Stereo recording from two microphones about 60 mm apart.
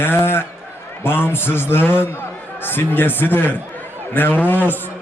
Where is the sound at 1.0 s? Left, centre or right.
Left.